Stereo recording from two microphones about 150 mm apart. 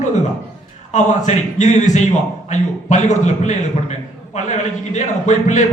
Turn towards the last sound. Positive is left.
turn(degrees=55)  # may be behind; listen again after turning